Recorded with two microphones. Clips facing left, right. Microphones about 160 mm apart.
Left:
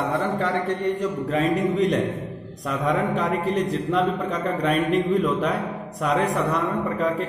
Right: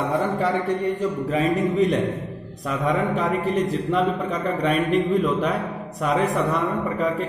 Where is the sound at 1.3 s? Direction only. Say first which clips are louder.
Even; centre (ahead or behind).